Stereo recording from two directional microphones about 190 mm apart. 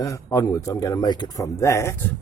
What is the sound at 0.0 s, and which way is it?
Speech, 15° left (ahead or behind).